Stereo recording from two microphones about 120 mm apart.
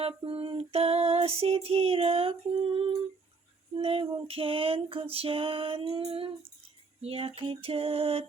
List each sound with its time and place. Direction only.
0.2 s female singing: 50° right (ahead or behind)